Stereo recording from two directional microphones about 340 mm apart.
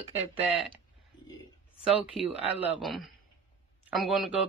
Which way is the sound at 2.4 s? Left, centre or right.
Centre.